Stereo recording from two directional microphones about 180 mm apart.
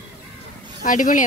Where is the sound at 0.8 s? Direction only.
45° left (ahead or behind).